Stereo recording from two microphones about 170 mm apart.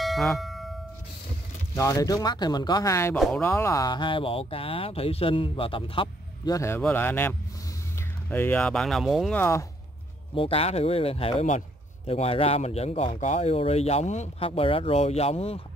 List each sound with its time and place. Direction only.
0.0 s bell: centre (ahead or behind)
0.4 s a sound: centre (ahead or behind)
1.8 s speech: 20° left (ahead or behind); by 9.4 s centre (ahead or behind)
9.4 s speech: 15° left (ahead or behind)
10.3 s speech: 35° left (ahead or behind)